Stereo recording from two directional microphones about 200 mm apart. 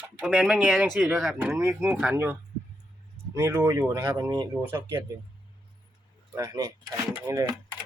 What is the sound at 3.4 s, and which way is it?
A man's voice, 15° right (ahead or behind).